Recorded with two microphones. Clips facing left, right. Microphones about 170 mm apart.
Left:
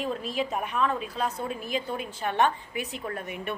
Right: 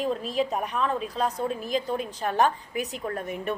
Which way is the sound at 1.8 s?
35° right (ahead or behind).